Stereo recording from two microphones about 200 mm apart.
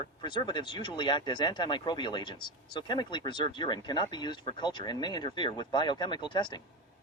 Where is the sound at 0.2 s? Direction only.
25° left (ahead or behind).